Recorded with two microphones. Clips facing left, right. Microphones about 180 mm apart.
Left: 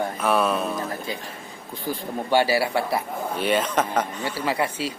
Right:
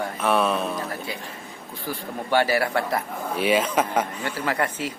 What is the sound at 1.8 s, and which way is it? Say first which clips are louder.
A man's voice: left 3 dB; 15° left (ahead or behind).